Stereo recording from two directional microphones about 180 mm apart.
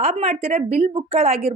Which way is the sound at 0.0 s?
35° right (ahead or behind).